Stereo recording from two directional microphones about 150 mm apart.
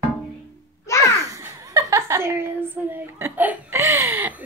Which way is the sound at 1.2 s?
20° right (ahead or behind).